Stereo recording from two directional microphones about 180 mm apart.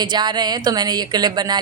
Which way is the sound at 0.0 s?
25° right (ahead or behind).